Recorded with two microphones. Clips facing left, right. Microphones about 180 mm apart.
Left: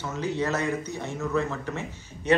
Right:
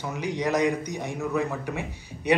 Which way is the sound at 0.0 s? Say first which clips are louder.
Even; 15° right (ahead or behind).